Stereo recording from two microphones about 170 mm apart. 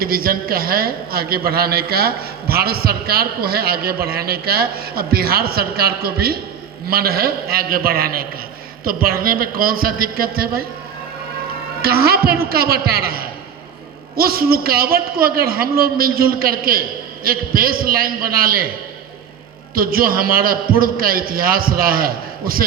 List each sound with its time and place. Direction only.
0.0 s a man's voice: 60° right (ahead or behind)
11.8 s a man's voice: 65° right (ahead or behind)
19.7 s a man's voice: 60° right (ahead or behind)